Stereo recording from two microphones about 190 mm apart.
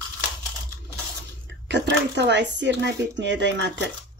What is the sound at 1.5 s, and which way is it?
Speech, 65° right (ahead or behind).